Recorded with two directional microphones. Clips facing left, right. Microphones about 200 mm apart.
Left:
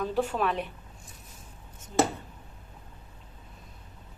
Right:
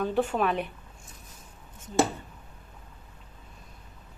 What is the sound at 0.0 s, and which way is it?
Speech, centre (ahead or behind).